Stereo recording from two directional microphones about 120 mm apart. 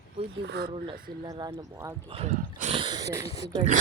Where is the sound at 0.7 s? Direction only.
45° right (ahead or behind).